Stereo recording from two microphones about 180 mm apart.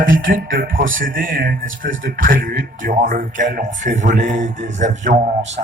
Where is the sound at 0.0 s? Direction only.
50° right (ahead or behind).